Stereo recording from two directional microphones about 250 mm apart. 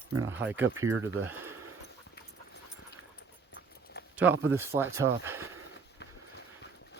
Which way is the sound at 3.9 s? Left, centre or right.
Left.